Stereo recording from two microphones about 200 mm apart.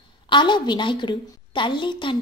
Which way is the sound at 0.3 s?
25° left (ahead or behind).